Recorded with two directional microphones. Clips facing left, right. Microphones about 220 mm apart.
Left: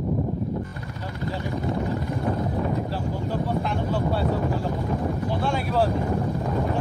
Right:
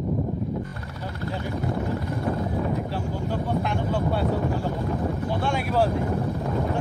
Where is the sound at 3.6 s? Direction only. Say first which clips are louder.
Even; centre (ahead or behind).